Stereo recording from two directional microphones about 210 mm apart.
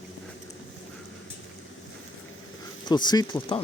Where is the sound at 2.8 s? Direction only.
20° left (ahead or behind).